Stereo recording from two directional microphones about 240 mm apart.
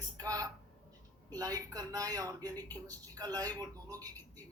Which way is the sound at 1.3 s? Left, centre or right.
Centre.